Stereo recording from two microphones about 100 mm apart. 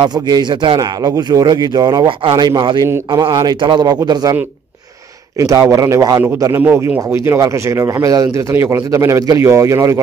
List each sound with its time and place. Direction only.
0.0 s a man's voice: 45° right (ahead or behind)
5.4 s a man's voice: 30° right (ahead or behind)